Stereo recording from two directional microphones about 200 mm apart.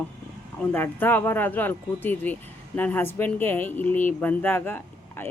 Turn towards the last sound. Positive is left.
turn(degrees=10)  # may be behind; listen again after turning